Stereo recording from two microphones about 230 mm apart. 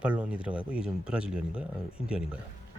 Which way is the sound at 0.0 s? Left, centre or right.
Centre.